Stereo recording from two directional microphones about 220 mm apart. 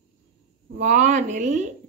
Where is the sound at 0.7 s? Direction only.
35° right (ahead or behind).